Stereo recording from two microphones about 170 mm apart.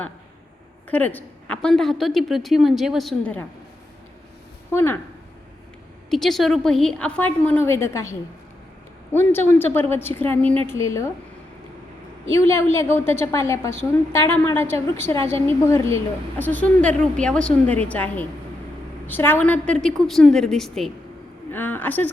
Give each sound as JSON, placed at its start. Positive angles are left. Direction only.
{"t": 0.9, "sound": "a woman's voice", "side_deg": 10}
{"t": 4.7, "sound": "speech", "side_deg": 15}
{"t": 6.1, "sound": "a woman's voice", "side_deg": 0}
{"t": 9.1, "sound": "a woman's voice", "side_deg": 10}
{"t": 12.3, "sound": "a woman's voice", "side_deg": 15}